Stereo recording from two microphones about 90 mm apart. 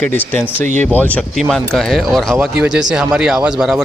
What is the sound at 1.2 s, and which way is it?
Speech, centre (ahead or behind).